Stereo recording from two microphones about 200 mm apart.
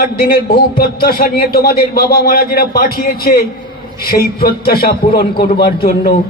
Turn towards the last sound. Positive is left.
turn(degrees=50)  # may be behind; listen again after turning